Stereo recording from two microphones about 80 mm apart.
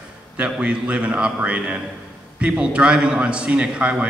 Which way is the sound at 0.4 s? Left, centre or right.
Centre.